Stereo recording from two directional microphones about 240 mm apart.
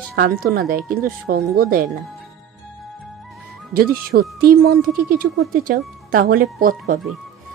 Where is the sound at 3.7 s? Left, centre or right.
Right.